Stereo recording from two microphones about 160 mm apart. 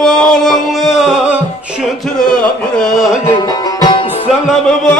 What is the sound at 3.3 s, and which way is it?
Music, 25° left (ahead or behind).